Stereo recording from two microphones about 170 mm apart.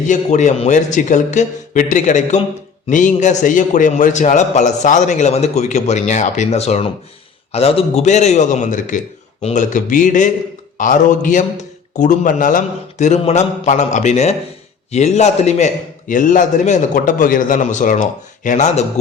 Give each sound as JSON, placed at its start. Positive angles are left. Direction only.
{"t": 0.1, "sound": "a man's voice", "side_deg": 45}